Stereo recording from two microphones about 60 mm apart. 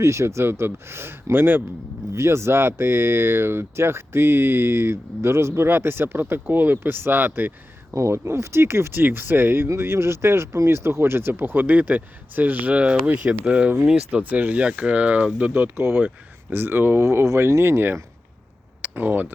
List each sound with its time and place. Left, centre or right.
0.0 s speech: right
2.1 s speech: right
7.9 s speech: right
15.5 s speech: right
18.9 s speech: right